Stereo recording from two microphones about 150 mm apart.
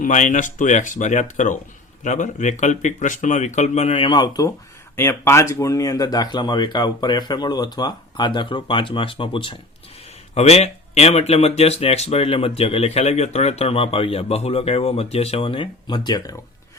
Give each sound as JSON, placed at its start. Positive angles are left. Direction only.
{"t": 0.0, "sound": "speech", "side_deg": 55}
{"t": 10.3, "sound": "speech", "side_deg": 45}